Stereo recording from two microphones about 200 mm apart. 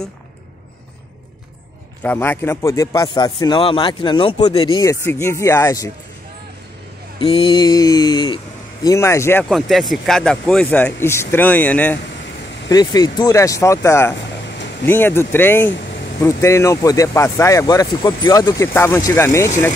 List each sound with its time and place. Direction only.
2.0 s a man's voice: 10° left (ahead or behind)
7.2 s mantra: 25° left (ahead or behind)
8.8 s a man's voice: 15° left (ahead or behind)
12.6 s a man's voice: 20° left (ahead or behind)